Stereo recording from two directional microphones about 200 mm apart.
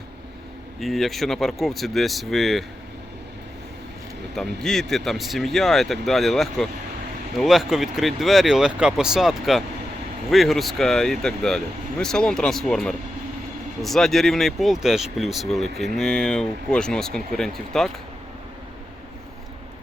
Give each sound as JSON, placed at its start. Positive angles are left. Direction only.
{"t": 0.8, "sound": "speech", "side_deg": 0}
{"t": 4.4, "sound": "speech", "side_deg": 0}